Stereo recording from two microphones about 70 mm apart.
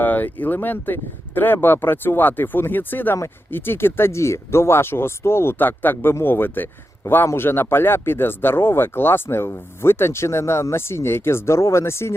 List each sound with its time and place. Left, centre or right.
0.0 s speech: left